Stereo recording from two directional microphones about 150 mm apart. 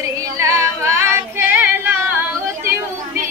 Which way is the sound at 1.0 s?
15° right (ahead or behind).